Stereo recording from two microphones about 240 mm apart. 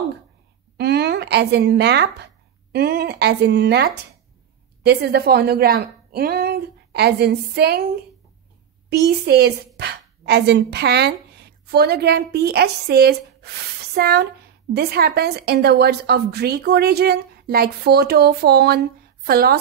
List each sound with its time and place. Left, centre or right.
0.7 s a woman's voice: right
8.9 s a woman's voice: right